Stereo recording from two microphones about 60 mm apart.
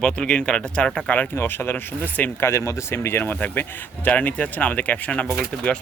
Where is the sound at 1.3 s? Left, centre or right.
Left.